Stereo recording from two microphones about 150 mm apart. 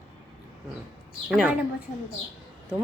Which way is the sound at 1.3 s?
5° right (ahead or behind).